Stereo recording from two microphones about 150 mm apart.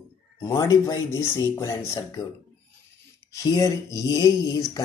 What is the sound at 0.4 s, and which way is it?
Speech, 20° left (ahead or behind).